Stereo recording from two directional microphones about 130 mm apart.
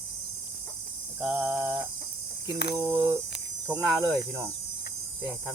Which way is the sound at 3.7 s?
20° right (ahead or behind).